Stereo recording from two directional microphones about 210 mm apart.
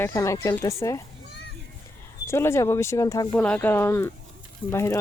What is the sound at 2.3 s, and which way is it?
Speech, 10° left (ahead or behind).